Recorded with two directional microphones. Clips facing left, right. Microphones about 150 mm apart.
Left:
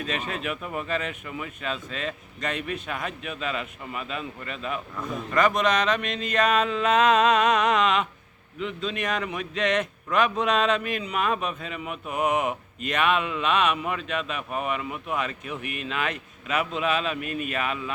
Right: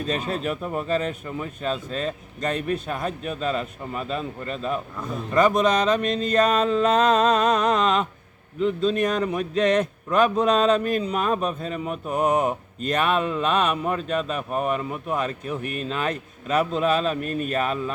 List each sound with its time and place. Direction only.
0.4 s a man's voice: 35° right (ahead or behind)
4.9 s a man's voice: centre (ahead or behind)
5.3 s a man's voice: 30° right (ahead or behind)